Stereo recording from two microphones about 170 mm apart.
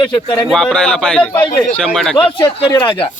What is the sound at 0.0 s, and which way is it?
Speech, 25° left (ahead or behind).